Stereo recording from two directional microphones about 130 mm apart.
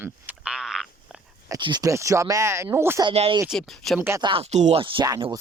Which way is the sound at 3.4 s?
Centre (ahead or behind).